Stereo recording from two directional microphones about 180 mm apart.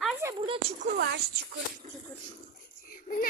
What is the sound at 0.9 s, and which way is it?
Speech, 70° right (ahead or behind).